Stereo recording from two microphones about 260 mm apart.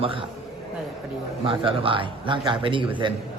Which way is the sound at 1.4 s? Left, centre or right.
Centre.